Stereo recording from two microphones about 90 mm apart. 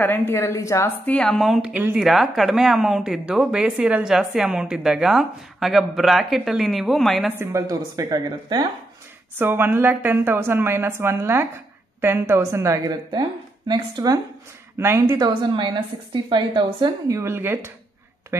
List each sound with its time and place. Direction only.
0.0 s a woman's voice: 25° left (ahead or behind)
1.0 s speech: 10° left (ahead or behind)
1.6 s speech: 20° right (ahead or behind)
2.0 s a woman's voice: centre (ahead or behind)
7.3 s speech: 35° right (ahead or behind)
9.4 s a woman's voice: 25° right (ahead or behind)
13.7 s speech: 45° right (ahead or behind)
14.8 s a woman's voice: 30° right (ahead or behind)
15.5 s a woman's voice: 60° right (ahead or behind)
17.1 s a woman's voice: 30° right (ahead or behind)